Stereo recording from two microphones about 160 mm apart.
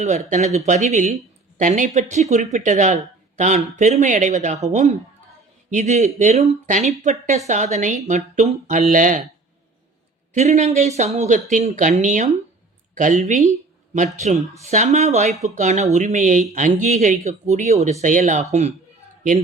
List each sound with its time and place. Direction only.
0.3 s speech: 45° right (ahead or behind)
10.3 s speech: 45° right (ahead or behind)